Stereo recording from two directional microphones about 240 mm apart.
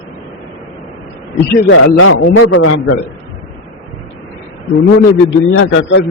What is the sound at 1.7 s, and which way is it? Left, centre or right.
A man's voice, left.